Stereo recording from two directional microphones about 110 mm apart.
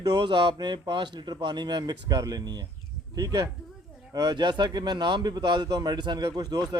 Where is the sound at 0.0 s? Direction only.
45° right (ahead or behind).